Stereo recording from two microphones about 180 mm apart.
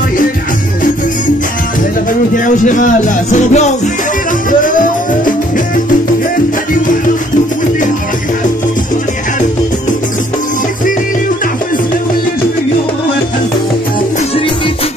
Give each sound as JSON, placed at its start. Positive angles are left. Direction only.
{"t": 2.3, "sound": "music", "side_deg": 45}